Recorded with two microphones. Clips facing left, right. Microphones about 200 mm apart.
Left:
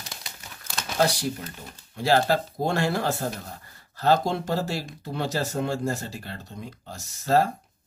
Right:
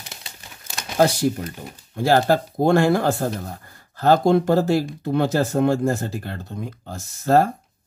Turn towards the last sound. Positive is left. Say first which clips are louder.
# right 5 dB
turn(degrees=-50)  # may be behind; listen again after turning